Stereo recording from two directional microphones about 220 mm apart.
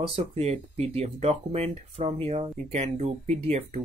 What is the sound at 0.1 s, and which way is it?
Speech, 30° right (ahead or behind).